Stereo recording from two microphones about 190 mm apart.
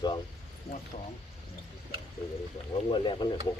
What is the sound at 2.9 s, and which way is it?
Speech, 25° left (ahead or behind).